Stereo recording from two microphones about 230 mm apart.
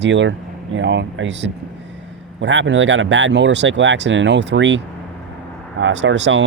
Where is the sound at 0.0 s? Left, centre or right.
Right.